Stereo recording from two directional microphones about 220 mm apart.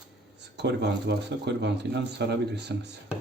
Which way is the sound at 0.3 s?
50° right (ahead or behind).